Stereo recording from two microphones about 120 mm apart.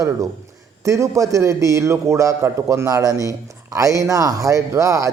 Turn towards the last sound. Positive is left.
turn(degrees=-25)  # may be behind; listen again after turning